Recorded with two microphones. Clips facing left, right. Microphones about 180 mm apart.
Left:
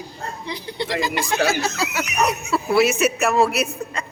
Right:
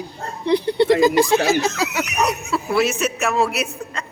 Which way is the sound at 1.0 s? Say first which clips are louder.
Right 9 dB; 45° right (ahead or behind).